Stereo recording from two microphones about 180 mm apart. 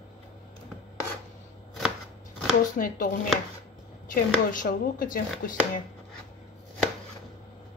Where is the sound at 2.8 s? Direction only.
50° left (ahead or behind).